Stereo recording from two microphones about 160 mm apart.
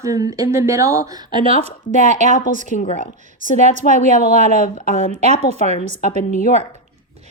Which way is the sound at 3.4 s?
50° right (ahead or behind).